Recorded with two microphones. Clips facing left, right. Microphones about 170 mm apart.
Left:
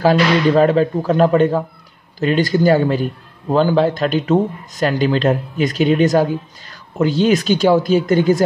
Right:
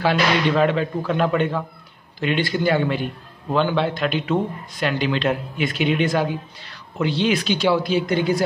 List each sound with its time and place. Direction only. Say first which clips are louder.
0.0 s a man's voice: left 6 dB; 40° left (ahead or behind)